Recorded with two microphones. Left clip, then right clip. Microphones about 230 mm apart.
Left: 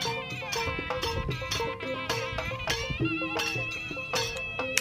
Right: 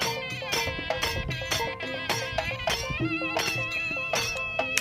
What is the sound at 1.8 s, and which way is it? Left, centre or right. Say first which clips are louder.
Music: right 1 dB; right.